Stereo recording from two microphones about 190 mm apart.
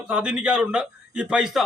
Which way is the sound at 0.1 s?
5° right (ahead or behind).